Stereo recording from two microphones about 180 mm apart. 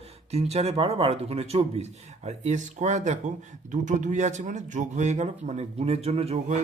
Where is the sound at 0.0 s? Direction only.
35° right (ahead or behind).